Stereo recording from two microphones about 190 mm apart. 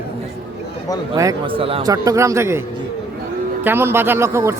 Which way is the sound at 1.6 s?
30° right (ahead or behind).